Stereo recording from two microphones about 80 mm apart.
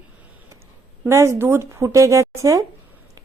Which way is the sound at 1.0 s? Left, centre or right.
Right.